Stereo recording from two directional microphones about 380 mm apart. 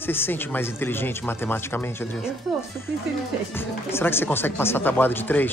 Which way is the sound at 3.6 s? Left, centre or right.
Centre.